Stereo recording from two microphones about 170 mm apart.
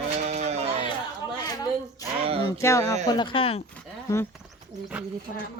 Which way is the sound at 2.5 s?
15° left (ahead or behind).